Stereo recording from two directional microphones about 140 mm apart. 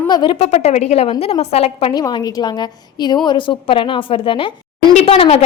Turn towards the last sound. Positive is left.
turn(degrees=45)  # may be behind; listen again after turning